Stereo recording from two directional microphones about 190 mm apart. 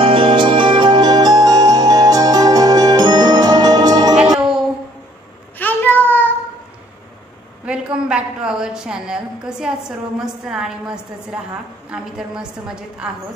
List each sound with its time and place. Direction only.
0.0 s music: 25° right (ahead or behind)
5.6 s a sound: 10° left (ahead or behind)
7.6 s a woman's voice: 5° right (ahead or behind)